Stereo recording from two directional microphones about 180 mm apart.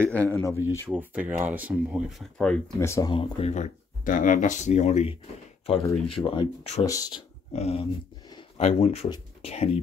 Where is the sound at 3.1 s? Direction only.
35° left (ahead or behind).